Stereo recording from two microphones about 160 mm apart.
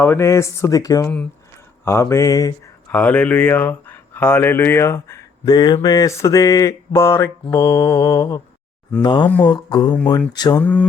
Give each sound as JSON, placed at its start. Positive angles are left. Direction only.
{"t": 0.0, "sound": "speech", "side_deg": 15}
{"t": 2.9, "sound": "speech", "side_deg": 10}
{"t": 10.6, "sound": "speech", "side_deg": 10}